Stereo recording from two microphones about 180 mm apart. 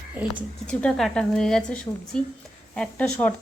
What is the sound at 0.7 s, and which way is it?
A woman's voice, 5° left (ahead or behind).